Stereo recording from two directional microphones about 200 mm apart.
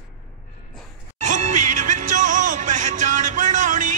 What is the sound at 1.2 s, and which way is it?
Music, 35° right (ahead or behind).